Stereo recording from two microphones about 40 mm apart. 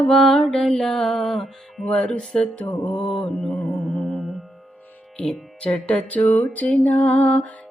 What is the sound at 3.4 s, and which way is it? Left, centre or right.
Music, centre.